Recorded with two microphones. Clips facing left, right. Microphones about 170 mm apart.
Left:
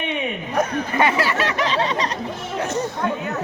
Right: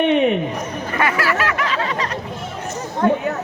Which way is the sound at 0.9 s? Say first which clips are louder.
Even; 25° left (ahead or behind).